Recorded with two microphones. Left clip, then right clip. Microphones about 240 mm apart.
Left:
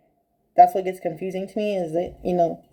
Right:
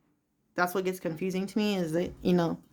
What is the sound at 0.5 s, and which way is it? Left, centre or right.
Speech, centre.